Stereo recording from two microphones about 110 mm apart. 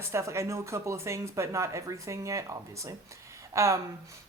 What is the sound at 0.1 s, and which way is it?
Speech, 25° right (ahead or behind).